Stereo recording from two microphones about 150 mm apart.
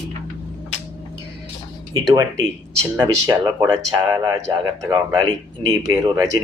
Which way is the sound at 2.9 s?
25° right (ahead or behind).